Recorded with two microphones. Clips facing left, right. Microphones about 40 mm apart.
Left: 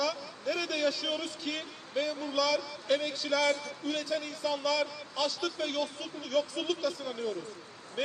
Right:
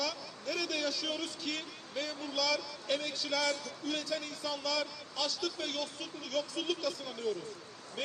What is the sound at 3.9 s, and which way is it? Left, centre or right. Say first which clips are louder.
Speech: left 3 dB; centre.